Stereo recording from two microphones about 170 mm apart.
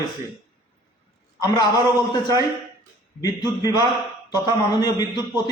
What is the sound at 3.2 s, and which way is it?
A man's voice, 20° left (ahead or behind).